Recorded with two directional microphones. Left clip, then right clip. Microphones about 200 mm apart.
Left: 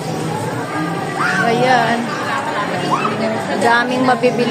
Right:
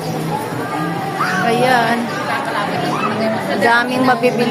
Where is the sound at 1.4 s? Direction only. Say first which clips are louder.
Even; centre (ahead or behind).